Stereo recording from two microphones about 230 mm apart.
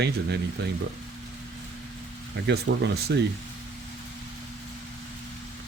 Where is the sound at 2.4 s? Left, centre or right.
Right.